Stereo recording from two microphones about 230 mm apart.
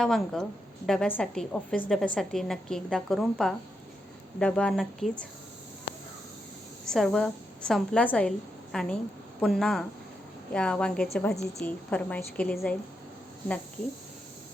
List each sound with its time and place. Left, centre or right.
0.0 s a woman's voice: centre
6.8 s a woman's voice: centre